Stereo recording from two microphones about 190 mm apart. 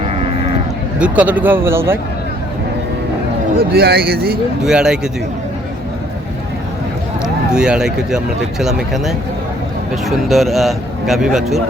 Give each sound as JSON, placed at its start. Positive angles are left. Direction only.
{"t": 0.9, "sound": "speech", "side_deg": -5}
{"t": 3.6, "sound": "speech", "side_deg": -55}
{"t": 4.6, "sound": "speech", "side_deg": -5}
{"t": 7.5, "sound": "speech", "side_deg": -5}